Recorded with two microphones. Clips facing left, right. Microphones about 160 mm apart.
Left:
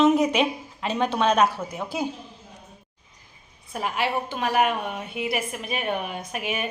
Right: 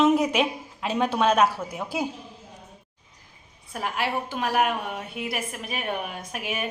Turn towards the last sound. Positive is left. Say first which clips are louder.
# left 2 dB
turn(degrees=0)  # may be behind; listen again after turning